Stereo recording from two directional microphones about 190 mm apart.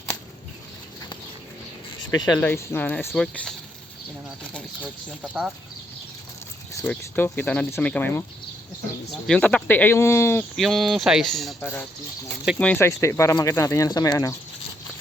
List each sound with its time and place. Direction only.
2.0 s speech: 20° left (ahead or behind)
2.5 s speech: 10° left (ahead or behind)
4.5 s speech: 5° left (ahead or behind)
6.8 s speech: 10° left (ahead or behind)
9.2 s speech: 5° left (ahead or behind)
10.6 s speech: centre (ahead or behind)
11.6 s speech: 15° left (ahead or behind)